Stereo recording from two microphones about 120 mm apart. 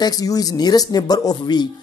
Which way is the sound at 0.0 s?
30° left (ahead or behind).